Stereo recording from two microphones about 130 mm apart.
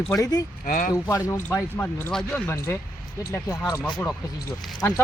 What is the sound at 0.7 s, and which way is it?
Speech, 90° left.